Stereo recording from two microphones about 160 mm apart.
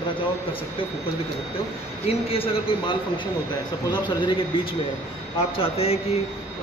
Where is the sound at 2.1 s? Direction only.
35° left (ahead or behind).